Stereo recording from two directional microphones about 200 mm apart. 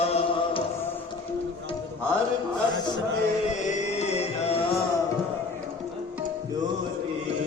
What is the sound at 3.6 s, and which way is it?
Music, 35° left (ahead or behind).